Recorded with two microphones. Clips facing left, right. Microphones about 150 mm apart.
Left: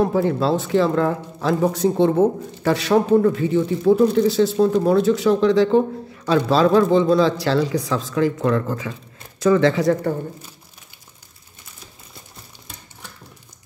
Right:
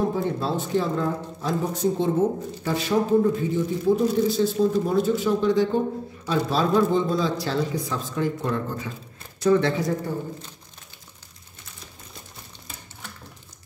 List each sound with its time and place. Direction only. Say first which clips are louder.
0.0 s a man's voice: left 6 dB; 90° left